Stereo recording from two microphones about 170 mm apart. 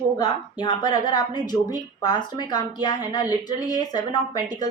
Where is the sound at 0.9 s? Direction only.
25° left (ahead or behind).